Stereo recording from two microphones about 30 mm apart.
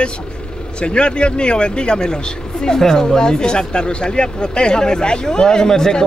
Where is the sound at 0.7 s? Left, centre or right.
Left.